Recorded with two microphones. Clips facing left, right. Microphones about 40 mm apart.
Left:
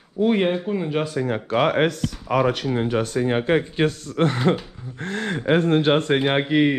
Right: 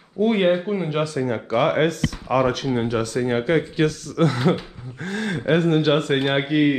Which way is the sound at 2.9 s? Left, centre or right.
Left.